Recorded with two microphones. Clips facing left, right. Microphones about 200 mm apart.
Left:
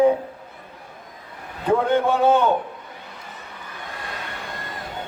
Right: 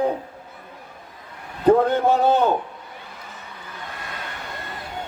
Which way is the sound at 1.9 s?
35° right (ahead or behind).